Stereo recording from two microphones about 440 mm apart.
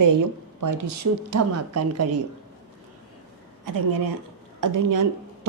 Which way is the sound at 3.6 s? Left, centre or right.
Right.